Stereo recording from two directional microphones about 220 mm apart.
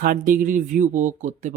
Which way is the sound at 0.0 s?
40° right (ahead or behind).